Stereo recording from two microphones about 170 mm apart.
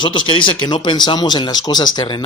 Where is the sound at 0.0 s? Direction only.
30° left (ahead or behind).